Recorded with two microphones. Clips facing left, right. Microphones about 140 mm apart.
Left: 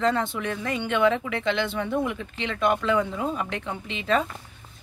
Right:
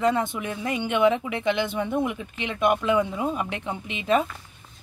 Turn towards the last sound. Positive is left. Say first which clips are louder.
# right 2 dB
turn(degrees=-15)  # may be behind; listen again after turning